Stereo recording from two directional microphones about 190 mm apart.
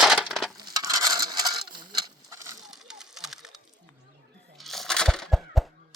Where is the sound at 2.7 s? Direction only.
Centre (ahead or behind).